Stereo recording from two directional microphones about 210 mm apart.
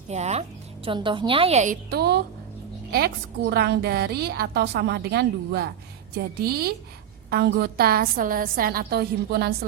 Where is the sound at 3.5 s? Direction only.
50° right (ahead or behind).